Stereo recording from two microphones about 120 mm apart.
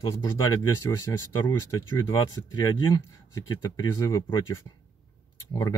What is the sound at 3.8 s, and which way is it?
Speech, 35° left (ahead or behind).